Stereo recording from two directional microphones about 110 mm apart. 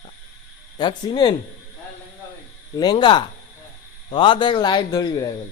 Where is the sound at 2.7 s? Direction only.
40° left (ahead or behind).